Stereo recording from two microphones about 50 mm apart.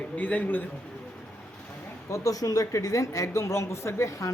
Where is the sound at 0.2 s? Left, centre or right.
Left.